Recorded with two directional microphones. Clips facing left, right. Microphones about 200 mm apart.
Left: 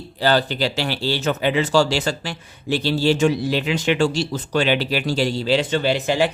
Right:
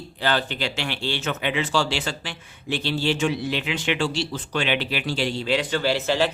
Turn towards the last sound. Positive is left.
turn(degrees=15)  # may be behind; listen again after turning